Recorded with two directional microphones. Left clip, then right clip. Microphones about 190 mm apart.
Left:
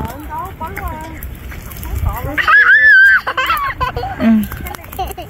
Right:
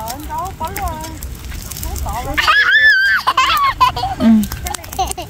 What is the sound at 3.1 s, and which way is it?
Baby laughter, 65° right (ahead or behind).